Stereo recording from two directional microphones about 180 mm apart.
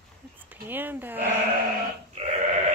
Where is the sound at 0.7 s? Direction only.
10° right (ahead or behind).